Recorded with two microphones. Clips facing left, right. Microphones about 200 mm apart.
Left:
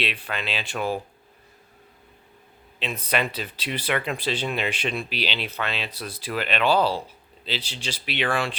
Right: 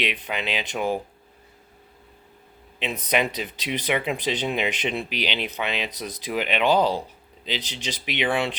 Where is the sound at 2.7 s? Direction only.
15° right (ahead or behind).